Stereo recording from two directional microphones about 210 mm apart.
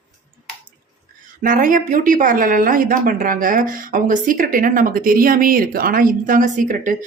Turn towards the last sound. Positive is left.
turn(degrees=-40)  # may be behind; listen again after turning